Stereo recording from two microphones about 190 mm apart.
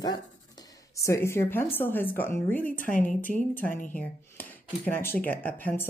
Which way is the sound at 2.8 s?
45° left (ahead or behind).